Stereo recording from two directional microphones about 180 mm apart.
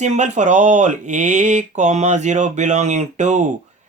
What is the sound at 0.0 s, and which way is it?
Speech, 40° right (ahead or behind).